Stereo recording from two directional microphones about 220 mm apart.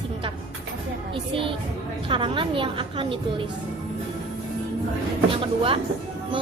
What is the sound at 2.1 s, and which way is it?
A woman's voice, 25° right (ahead or behind).